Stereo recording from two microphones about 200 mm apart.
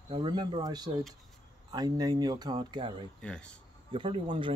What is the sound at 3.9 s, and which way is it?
Speech, 25° right (ahead or behind).